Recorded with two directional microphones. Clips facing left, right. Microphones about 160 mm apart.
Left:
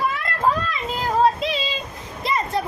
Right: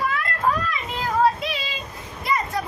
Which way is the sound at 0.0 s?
20° left (ahead or behind).